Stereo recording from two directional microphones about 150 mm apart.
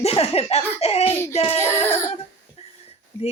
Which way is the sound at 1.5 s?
15° left (ahead or behind).